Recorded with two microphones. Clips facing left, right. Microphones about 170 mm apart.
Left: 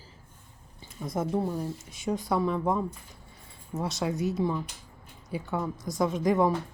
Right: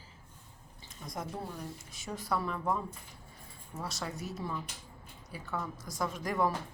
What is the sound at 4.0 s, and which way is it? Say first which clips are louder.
A woman's voice: left 14 dB; 20° left (ahead or behind).